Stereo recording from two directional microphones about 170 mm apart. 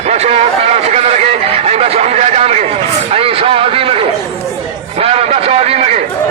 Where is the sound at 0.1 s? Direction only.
40° right (ahead or behind).